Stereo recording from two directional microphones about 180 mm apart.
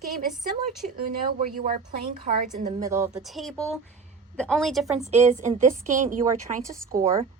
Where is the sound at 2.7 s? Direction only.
15° right (ahead or behind).